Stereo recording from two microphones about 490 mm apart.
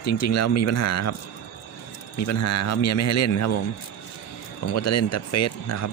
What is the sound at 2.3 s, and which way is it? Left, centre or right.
Speech, left.